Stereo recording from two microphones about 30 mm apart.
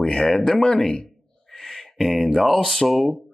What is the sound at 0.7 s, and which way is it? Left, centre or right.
Speech, left.